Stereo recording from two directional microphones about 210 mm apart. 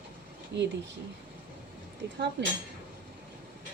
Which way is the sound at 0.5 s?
55° right (ahead or behind).